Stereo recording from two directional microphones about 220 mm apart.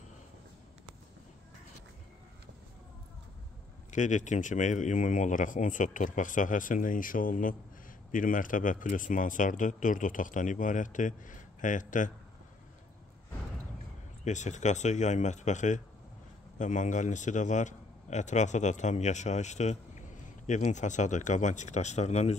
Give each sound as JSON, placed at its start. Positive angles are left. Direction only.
{"t": 3.9, "sound": "a man's voice", "side_deg": 35}
{"t": 14.2, "sound": "a man's voice", "side_deg": 35}